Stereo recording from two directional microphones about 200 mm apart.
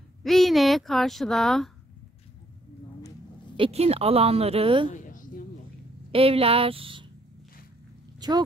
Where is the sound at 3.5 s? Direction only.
30° right (ahead or behind).